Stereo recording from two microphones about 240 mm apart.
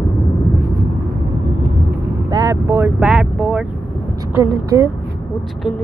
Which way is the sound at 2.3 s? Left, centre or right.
Centre.